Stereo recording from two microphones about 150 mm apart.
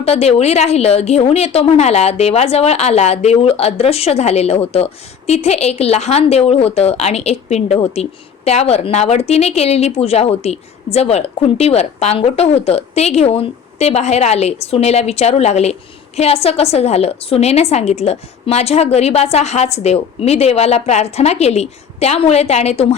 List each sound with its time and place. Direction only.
0.0 s a woman's voice: 45° left (ahead or behind)